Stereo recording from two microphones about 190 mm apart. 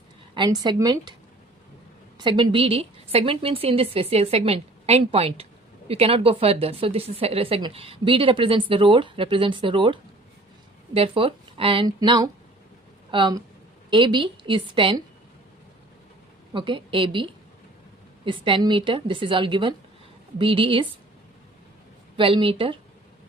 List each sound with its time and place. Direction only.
0.3 s a woman's voice: 25° right (ahead or behind)
2.1 s a woman's voice: 25° right (ahead or behind)
16.5 s a woman's voice: 25° right (ahead or behind)
18.3 s a woman's voice: 25° right (ahead or behind)
22.2 s a woman's voice: 30° right (ahead or behind)